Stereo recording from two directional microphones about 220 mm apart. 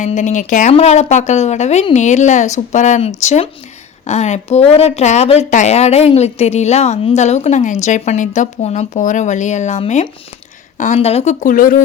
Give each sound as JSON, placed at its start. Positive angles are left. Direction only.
{"t": 0.0, "sound": "speech", "side_deg": 35}